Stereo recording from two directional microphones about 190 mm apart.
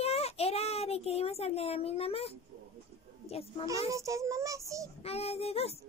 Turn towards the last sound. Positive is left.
turn(degrees=30)  # may be behind; listen again after turning